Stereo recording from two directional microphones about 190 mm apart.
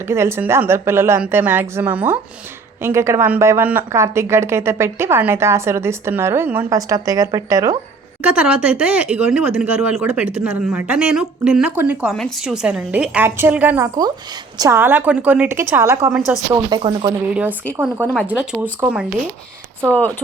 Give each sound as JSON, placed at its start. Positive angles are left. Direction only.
{"t": 0.1, "sound": "speech", "side_deg": -15}
{"t": 17.7, "sound": "speech", "side_deg": -10}
{"t": 19.9, "sound": "speech", "side_deg": 10}